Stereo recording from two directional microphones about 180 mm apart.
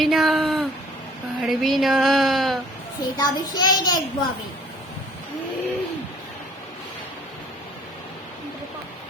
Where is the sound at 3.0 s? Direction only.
25° left (ahead or behind).